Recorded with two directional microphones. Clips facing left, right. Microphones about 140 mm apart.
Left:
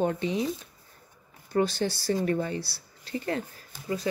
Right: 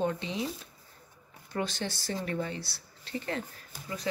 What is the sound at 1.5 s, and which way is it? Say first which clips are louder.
Speech: left 8 dB; 40° left (ahead or behind).